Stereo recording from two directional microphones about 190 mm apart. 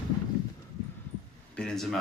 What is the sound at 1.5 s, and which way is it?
Speech, 5° left (ahead or behind).